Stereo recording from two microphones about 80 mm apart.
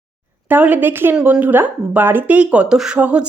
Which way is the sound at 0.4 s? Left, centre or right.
Right.